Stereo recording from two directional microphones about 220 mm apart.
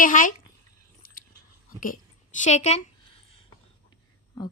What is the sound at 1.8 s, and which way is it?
Speech, 40° left (ahead or behind).